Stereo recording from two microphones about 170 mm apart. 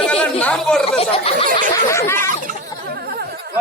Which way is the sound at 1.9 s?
15° left (ahead or behind).